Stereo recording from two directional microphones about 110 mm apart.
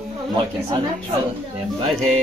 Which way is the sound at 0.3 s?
60° right (ahead or behind).